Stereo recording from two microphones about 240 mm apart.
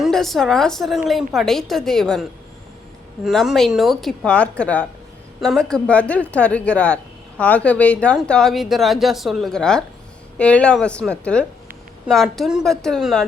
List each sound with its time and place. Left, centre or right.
0.0 s a woman's voice: centre
3.2 s a woman's voice: centre